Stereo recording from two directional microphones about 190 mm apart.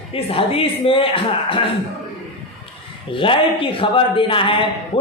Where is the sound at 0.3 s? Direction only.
30° left (ahead or behind).